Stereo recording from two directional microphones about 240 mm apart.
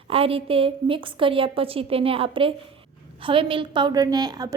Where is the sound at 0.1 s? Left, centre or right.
Right.